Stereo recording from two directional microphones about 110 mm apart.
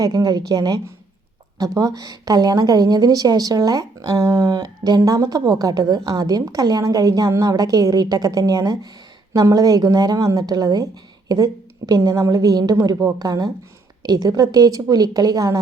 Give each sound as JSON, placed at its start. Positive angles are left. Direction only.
{"t": 0.0, "sound": "a woman's voice", "side_deg": -35}